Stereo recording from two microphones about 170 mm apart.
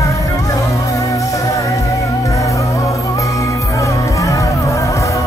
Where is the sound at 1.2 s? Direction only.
20° left (ahead or behind).